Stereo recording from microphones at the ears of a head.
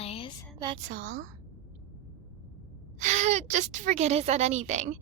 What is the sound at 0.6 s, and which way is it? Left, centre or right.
Speech, right.